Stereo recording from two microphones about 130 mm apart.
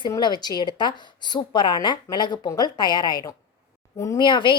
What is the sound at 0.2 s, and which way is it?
Speech, 35° left (ahead or behind).